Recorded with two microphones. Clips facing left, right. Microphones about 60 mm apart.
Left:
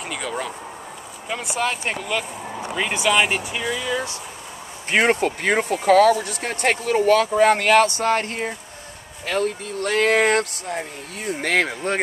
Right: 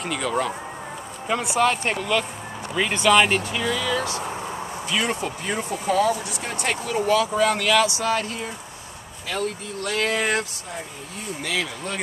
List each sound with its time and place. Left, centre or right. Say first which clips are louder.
0.1 s speech: right 4 dB; centre; by 4.1 s left
4.8 s speech: left 8 dB; left
6.1 s speech: left 3 dB; left